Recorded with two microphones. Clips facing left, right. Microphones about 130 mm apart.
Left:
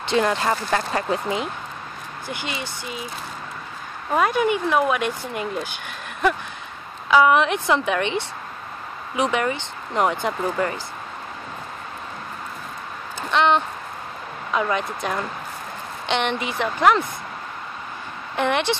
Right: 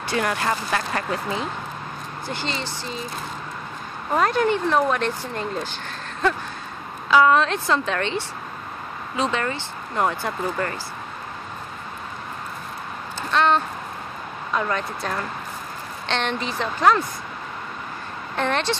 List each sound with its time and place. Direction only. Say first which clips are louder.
0.0 s speech: left 3 dB; 25° left (ahead or behind)
4.2 s speech: even; 10° left (ahead or behind)
7.1 s speech: even; 15° left (ahead or behind)
13.3 s speech: left 1 dB; 15° left (ahead or behind)
18.3 s speech: left 2 dB; 15° left (ahead or behind)